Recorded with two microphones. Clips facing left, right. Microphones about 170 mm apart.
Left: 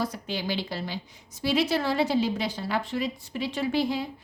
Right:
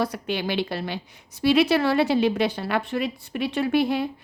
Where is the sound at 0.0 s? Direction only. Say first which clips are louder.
Right 5 dB; 65° right (ahead or behind).